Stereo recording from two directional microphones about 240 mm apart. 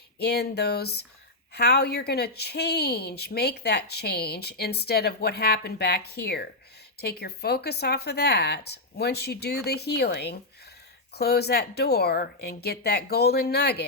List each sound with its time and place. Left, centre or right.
0.2 s speech: left